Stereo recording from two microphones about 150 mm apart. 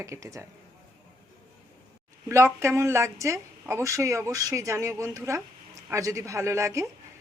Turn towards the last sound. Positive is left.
turn(degrees=-20)  # may be behind; listen again after turning